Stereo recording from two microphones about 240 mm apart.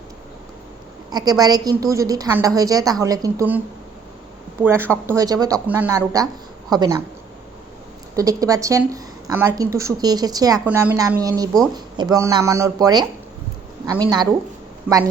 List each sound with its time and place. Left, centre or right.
1.1 s a woman's voice: centre
4.6 s a woman's voice: centre
8.1 s a woman's voice: centre